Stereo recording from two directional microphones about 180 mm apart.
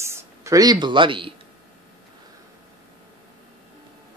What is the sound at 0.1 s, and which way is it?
Speech, 15° right (ahead or behind).